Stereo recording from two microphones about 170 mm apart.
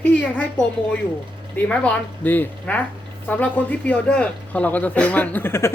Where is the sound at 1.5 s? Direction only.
5° left (ahead or behind).